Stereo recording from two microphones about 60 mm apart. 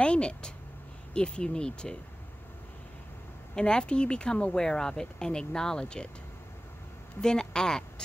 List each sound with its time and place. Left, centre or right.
0.0 s a sound: centre
1.1 s speech: centre
3.5 s speech: centre
7.2 s speech: centre